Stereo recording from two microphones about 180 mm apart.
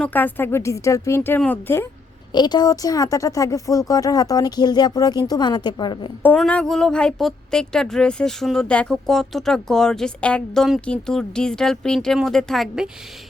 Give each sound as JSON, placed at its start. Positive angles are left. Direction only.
{"t": 0.0, "sound": "speech", "side_deg": 10}
{"t": 2.3, "sound": "speech", "side_deg": 25}
{"t": 6.2, "sound": "a woman's voice", "side_deg": 5}